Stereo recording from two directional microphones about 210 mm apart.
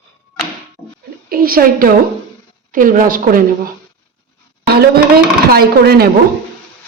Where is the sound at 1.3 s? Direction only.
45° right (ahead or behind).